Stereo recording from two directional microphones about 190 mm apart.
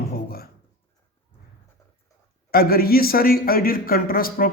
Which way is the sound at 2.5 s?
50° left (ahead or behind).